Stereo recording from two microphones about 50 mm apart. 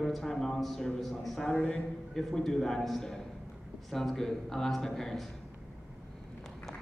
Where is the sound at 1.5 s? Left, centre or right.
Left.